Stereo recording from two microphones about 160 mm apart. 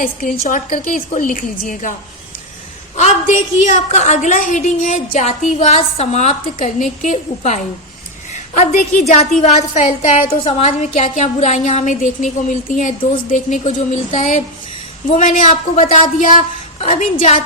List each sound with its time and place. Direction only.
0.0 s a woman's voice: 60° left (ahead or behind)
8.3 s a sound: 45° left (ahead or behind)
9.0 s a woman's voice: 50° left (ahead or behind)
16.8 s a woman's voice: 40° left (ahead or behind)